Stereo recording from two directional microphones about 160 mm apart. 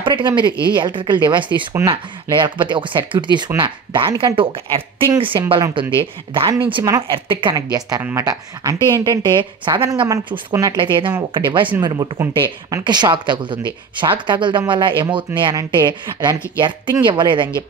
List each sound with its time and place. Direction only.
0.0 s a woman's voice: 30° right (ahead or behind)